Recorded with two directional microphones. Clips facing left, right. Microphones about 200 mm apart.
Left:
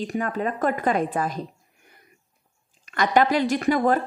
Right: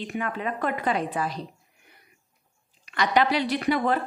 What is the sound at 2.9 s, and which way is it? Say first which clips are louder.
A woman's voice: left 3 dB; 45° left (ahead or behind).